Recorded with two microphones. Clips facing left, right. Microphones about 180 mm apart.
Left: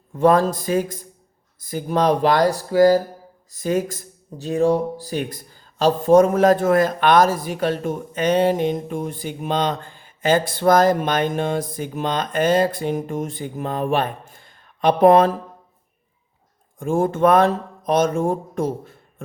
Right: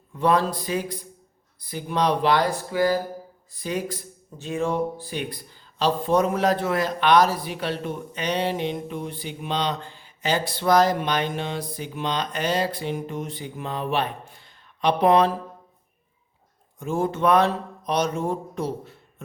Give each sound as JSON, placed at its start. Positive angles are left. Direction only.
{"t": 0.1, "sound": "speech", "side_deg": 45}
{"t": 16.8, "sound": "speech", "side_deg": 50}